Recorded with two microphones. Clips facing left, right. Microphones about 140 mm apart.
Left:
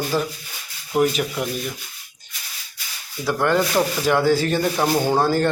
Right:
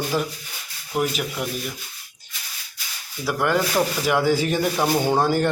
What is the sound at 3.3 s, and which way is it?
Speech, 5° right (ahead or behind).